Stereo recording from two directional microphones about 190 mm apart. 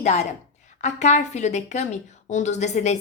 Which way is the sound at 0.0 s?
40° left (ahead or behind).